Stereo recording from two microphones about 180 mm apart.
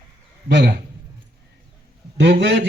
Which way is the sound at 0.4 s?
70° right (ahead or behind).